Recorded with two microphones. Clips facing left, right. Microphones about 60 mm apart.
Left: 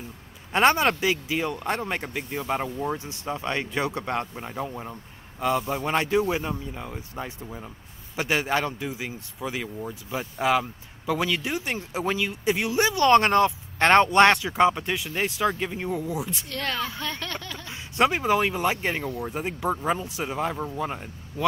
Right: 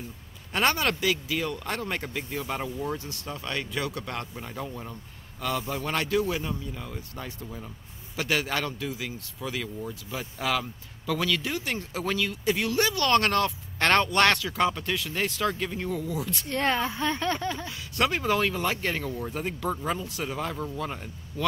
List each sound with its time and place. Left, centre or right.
0.5 s speech: left
16.4 s speech: right
17.6 s speech: left